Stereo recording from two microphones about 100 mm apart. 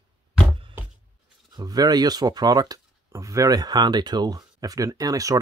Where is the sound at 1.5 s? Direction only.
40° right (ahead or behind).